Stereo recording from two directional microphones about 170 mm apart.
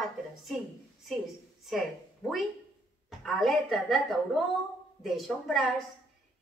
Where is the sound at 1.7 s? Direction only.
Centre (ahead or behind).